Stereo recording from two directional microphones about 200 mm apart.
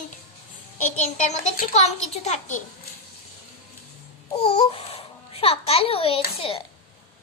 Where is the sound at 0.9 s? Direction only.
35° left (ahead or behind).